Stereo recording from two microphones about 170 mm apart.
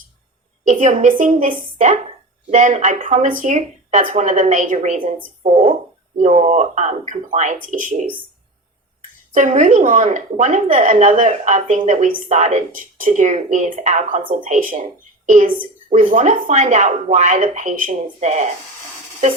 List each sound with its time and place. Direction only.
0.6 s a woman's voice: 45° right (ahead or behind)
9.3 s a woman's voice: 45° right (ahead or behind)